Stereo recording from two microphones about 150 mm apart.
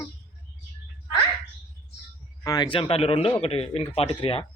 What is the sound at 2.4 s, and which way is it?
Speech, 30° left (ahead or behind).